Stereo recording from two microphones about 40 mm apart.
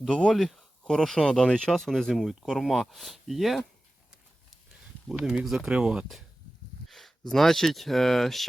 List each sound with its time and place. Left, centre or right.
0.1 s speech: left
0.3 s a sound: centre
1.0 s speech: centre
5.0 s speech: centre
5.6 s speech: right
6.8 s speech: centre